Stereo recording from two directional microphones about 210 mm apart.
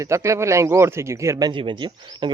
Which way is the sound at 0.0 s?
15° right (ahead or behind).